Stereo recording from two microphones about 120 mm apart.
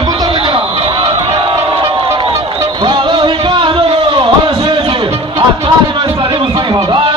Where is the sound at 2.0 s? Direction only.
50° right (ahead or behind).